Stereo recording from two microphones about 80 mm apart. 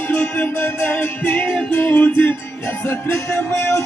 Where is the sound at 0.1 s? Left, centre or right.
Left.